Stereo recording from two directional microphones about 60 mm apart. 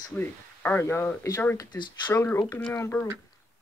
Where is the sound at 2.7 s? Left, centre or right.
Left.